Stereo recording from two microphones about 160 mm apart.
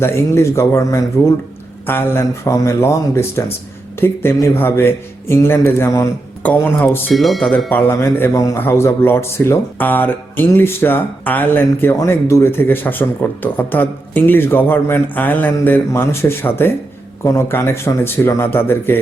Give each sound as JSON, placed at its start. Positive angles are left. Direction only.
{"t": 0.0, "sound": "a man's voice", "side_deg": 15}
{"t": 7.1, "sound": "speech", "side_deg": 0}
{"t": 7.7, "sound": "a man's voice", "side_deg": 10}